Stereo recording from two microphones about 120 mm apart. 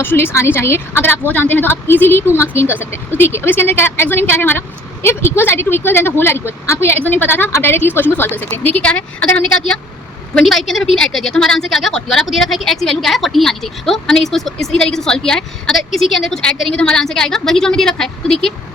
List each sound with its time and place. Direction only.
0.0 s a woman's voice: 20° left (ahead or behind)
10.3 s a woman's voice: centre (ahead or behind)